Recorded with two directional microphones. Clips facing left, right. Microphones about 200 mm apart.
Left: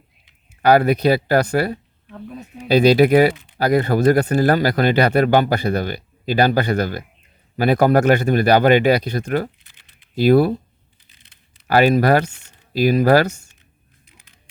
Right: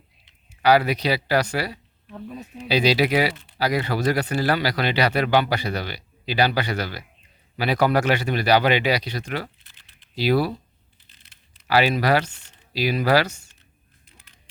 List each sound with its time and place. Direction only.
0.6 s speech: 50° left (ahead or behind)
11.7 s speech: 50° left (ahead or behind)